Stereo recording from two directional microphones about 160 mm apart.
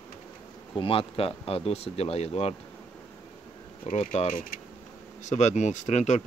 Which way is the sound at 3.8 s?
45° left (ahead or behind).